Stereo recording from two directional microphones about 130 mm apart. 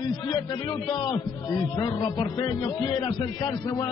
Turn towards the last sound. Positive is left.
turn(degrees=30)  # may be behind; listen again after turning